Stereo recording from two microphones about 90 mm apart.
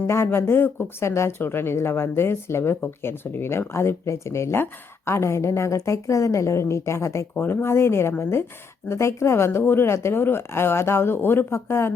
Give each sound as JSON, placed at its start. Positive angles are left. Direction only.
{"t": 0.1, "sound": "speech", "side_deg": 30}